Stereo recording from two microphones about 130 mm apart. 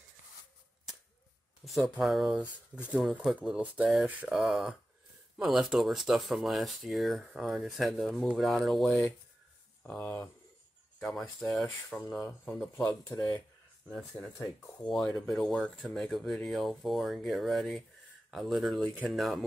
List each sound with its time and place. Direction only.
1.6 s speech: centre (ahead or behind)
9.8 s speech: 15° left (ahead or behind)
11.0 s speech: 5° left (ahead or behind)
13.1 s speech: 30° left (ahead or behind)
13.8 s speech: 5° left (ahead or behind)